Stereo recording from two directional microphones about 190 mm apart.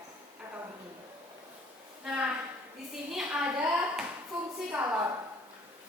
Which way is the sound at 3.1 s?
5° right (ahead or behind).